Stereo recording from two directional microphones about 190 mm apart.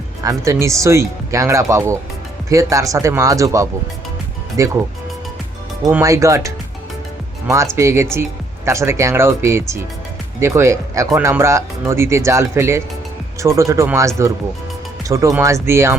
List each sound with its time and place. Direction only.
0.2 s speech: 15° right (ahead or behind)
5.8 s speech: 15° right (ahead or behind)